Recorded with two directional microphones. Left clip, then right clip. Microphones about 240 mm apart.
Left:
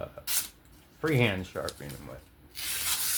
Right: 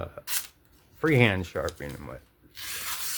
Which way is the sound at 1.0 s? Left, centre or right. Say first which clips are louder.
Right 5 dB; right.